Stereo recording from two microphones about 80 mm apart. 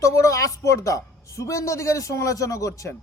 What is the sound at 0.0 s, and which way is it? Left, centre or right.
A man's voice, left.